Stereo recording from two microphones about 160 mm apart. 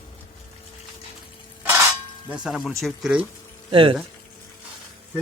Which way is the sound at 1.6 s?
15° right (ahead or behind).